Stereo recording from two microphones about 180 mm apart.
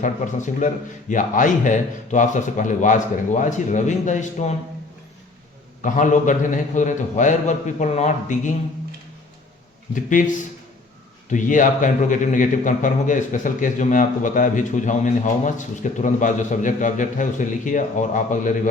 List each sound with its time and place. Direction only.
0.0 s a man's voice: 45° left (ahead or behind)
5.8 s a man's voice: 45° left (ahead or behind)
9.9 s a man's voice: 45° left (ahead or behind)
11.3 s a man's voice: 45° left (ahead or behind)